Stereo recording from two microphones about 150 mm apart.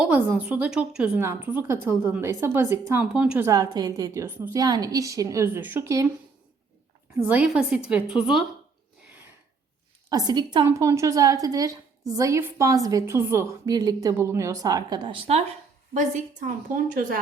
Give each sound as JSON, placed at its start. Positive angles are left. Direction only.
{"t": 0.3, "sound": "a woman's voice", "side_deg": -10}
{"t": 3.4, "sound": "a woman's voice", "side_deg": -25}
{"t": 7.3, "sound": "a woman's voice", "side_deg": -5}
{"t": 10.1, "sound": "a woman's voice", "side_deg": -25}
{"t": 16.0, "sound": "a woman's voice", "side_deg": -60}